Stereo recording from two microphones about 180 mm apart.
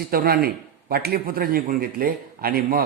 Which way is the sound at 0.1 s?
55° right (ahead or behind).